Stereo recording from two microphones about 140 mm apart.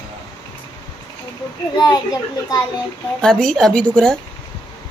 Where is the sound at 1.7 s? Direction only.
30° left (ahead or behind).